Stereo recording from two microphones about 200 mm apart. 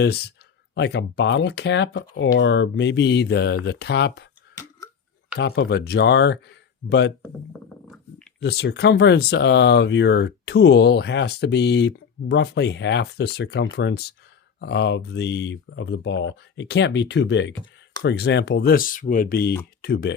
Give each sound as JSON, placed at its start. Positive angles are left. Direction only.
{"t": 0.0, "sound": "speech", "side_deg": 55}
{"t": 5.4, "sound": "speech", "side_deg": 55}
{"t": 8.4, "sound": "speech", "side_deg": 55}